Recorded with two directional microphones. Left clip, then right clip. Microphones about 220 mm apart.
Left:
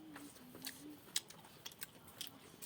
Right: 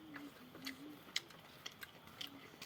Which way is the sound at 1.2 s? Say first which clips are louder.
Even; 35° left (ahead or behind).